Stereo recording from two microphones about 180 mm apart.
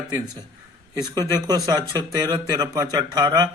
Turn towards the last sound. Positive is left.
turn(degrees=-20)  # may be behind; listen again after turning